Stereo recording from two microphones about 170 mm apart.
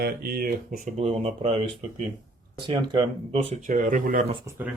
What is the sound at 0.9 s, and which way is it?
Speech, 40° right (ahead or behind).